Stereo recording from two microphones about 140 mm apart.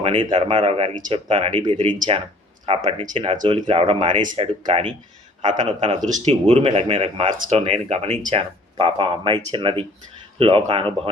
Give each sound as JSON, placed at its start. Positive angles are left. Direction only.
{"t": 0.0, "sound": "speech", "side_deg": -40}